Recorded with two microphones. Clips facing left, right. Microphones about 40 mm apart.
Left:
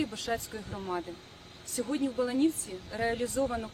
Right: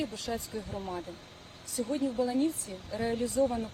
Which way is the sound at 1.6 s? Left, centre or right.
Left.